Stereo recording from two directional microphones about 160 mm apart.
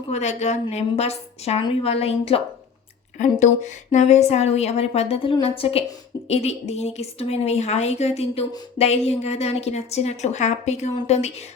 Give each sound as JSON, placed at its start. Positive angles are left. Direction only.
{"t": 0.1, "sound": "a woman's voice", "side_deg": 45}